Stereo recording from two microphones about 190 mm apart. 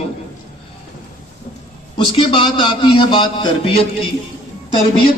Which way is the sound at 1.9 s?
25° left (ahead or behind).